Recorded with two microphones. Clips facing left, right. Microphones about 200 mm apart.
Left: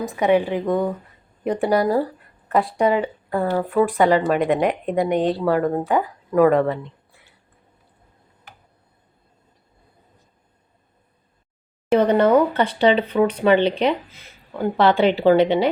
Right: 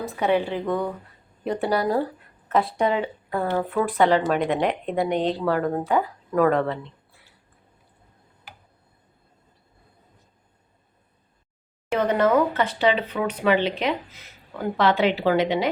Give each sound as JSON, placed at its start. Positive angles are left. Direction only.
{"t": 0.0, "sound": "a woman's voice", "side_deg": 15}
{"t": 2.6, "sound": "a woman's voice", "side_deg": 0}
{"t": 11.9, "sound": "a sound", "side_deg": 35}
{"t": 13.4, "sound": "speech", "side_deg": 30}